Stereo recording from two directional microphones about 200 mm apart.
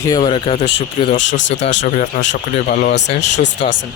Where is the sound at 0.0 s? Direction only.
20° left (ahead or behind).